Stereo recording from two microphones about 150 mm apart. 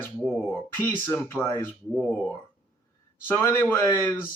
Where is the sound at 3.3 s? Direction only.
15° left (ahead or behind).